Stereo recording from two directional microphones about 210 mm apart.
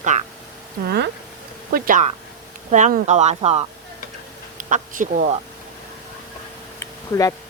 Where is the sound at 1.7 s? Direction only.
40° right (ahead or behind).